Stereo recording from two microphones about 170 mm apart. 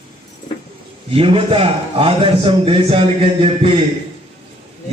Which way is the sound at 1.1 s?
30° right (ahead or behind).